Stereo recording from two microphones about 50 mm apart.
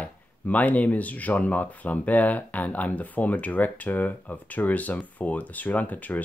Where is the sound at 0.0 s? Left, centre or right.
Left.